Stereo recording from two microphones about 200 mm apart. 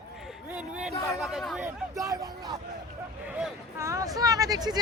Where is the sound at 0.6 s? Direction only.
5° right (ahead or behind).